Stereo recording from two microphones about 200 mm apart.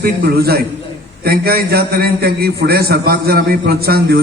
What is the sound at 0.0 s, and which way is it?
A man's voice, 50° right (ahead or behind).